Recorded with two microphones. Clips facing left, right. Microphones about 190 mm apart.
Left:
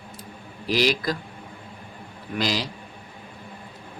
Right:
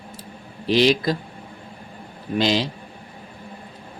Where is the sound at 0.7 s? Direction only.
25° right (ahead or behind).